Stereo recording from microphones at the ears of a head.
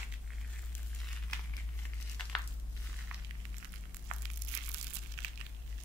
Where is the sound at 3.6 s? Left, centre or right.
Right.